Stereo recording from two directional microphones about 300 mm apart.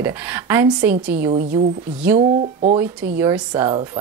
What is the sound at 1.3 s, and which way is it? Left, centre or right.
Speech, right.